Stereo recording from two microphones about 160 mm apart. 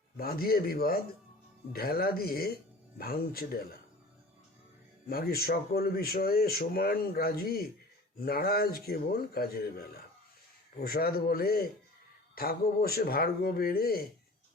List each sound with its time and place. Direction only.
0.2 s speech: 70° left (ahead or behind)
5.0 s speech: 70° left (ahead or behind)